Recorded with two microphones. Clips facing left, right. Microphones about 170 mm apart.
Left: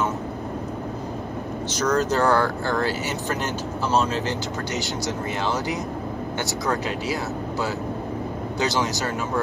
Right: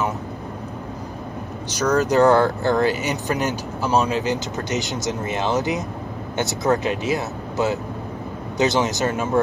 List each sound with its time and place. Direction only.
1.8 s speech: 15° right (ahead or behind)